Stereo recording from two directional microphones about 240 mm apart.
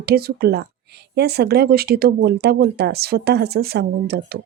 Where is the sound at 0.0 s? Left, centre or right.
Right.